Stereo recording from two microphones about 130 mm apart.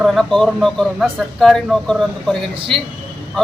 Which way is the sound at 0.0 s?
Centre (ahead or behind).